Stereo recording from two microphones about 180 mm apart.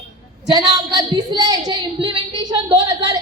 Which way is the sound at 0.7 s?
20° right (ahead or behind).